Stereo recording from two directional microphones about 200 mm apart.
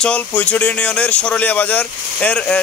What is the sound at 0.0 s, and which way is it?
Speech, 5° left (ahead or behind).